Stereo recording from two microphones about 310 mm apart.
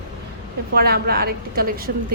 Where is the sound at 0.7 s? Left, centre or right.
Right.